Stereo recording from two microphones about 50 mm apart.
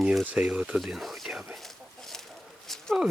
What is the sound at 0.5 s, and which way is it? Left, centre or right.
Speech, right.